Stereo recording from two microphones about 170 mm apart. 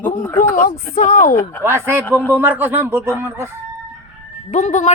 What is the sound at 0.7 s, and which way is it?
Speech, 40° left (ahead or behind).